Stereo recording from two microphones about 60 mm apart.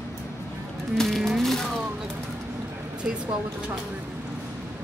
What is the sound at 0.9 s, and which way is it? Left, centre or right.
Ratchet, centre.